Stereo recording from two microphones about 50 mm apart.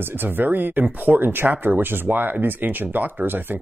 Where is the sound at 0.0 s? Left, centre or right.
Right.